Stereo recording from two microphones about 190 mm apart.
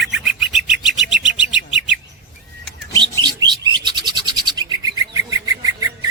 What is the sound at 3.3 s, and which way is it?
Bird, 20° right (ahead or behind).